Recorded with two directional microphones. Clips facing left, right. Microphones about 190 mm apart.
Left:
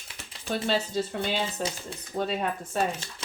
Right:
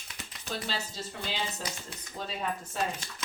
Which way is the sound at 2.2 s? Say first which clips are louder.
Left 7 dB; 60° left (ahead or behind).